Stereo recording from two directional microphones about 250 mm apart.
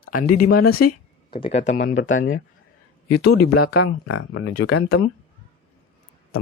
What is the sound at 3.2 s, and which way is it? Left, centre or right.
Speech, left.